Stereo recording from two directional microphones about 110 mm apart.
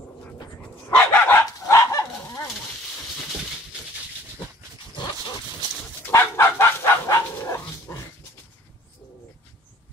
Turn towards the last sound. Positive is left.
turn(degrees=25)  # may be behind; listen again after turning